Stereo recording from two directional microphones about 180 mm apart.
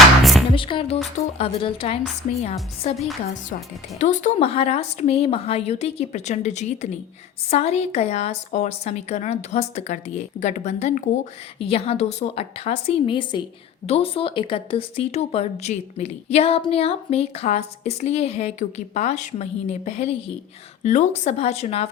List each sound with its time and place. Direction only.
0.2 s music: centre (ahead or behind)
0.5 s music: 30° left (ahead or behind)
1.4 s a woman's voice: 30° left (ahead or behind)